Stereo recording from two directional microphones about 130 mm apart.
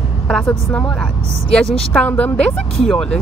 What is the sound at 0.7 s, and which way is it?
Speech, 10° left (ahead or behind).